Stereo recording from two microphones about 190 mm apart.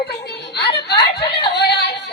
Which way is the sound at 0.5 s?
60° left (ahead or behind).